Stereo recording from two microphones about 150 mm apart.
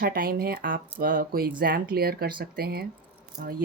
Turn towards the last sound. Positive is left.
turn(degrees=-75)  # may be behind; listen again after turning